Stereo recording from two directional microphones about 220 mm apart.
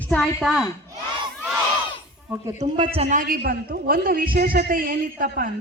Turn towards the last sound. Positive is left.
turn(degrees=-40)  # may be behind; listen again after turning